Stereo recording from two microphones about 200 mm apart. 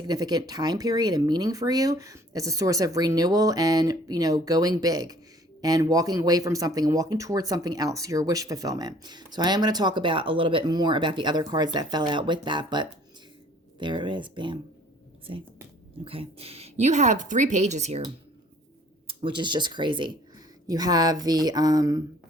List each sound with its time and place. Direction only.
0.1 s speech: 20° right (ahead or behind)
19.0 s speech: 25° right (ahead or behind)